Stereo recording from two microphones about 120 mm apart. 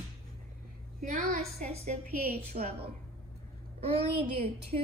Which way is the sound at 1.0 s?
85° right.